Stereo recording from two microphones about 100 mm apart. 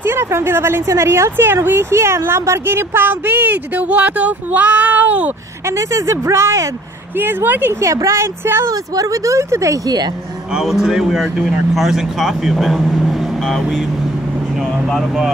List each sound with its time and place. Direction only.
0.0 s speech: 25° right (ahead or behind)
5.7 s speech: 30° right (ahead or behind)
7.9 s speech: 30° right (ahead or behind)
10.5 s speech: 5° right (ahead or behind)
14.9 s speech: centre (ahead or behind)